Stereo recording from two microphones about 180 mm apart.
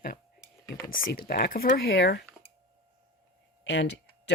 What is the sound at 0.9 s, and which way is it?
Speech, 60° left (ahead or behind).